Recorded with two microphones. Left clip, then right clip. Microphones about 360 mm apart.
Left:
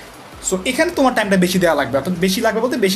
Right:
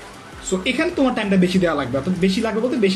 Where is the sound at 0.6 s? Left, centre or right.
Centre.